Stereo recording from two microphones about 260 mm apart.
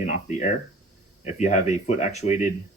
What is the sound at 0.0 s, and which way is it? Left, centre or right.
Speech, left.